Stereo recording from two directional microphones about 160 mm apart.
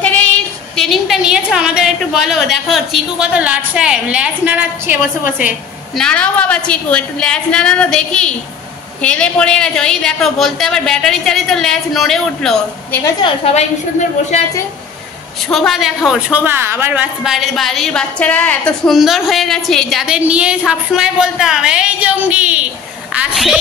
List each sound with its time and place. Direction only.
0.0 s a sound: 10° left (ahead or behind)
0.7 s a woman's voice: centre (ahead or behind)
5.9 s a woman's voice: 5° left (ahead or behind)
13.2 s a woman's voice: 45° left (ahead or behind)
15.5 s a woman's voice: centre (ahead or behind)